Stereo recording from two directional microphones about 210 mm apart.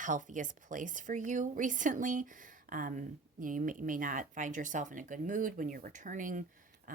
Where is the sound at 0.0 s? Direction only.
35° right (ahead or behind).